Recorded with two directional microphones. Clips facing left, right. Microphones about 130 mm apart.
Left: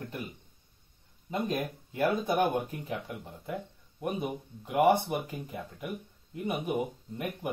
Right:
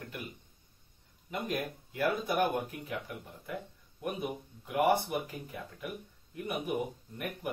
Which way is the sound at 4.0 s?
25° left (ahead or behind).